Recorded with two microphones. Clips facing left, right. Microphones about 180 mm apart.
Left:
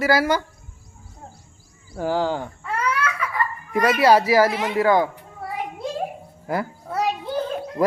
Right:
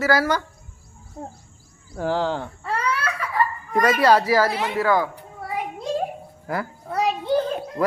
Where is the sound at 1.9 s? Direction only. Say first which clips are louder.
Left 1 dB; 5° left (ahead or behind).